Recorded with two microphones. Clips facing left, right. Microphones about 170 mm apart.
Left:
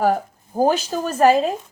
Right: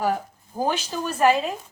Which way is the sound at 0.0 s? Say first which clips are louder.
Left 5 dB; 45° left (ahead or behind).